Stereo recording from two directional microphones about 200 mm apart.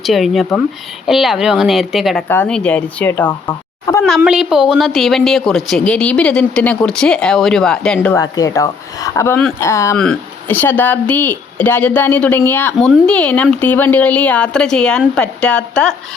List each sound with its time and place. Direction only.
0.0 s a woman's voice: centre (ahead or behind)
2.2 s speech: 10° left (ahead or behind)
3.4 s a sound: 15° left (ahead or behind)
4.2 s a woman's voice: 5° right (ahead or behind)